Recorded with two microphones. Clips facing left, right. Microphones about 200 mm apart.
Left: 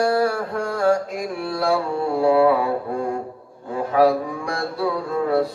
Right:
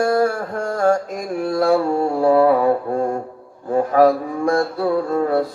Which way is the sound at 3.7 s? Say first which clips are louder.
Right 3 dB; 45° right (ahead or behind).